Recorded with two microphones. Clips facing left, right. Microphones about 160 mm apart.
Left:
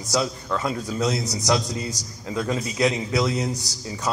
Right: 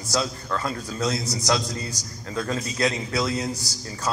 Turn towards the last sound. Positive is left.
turn(degrees=15)  # may be behind; listen again after turning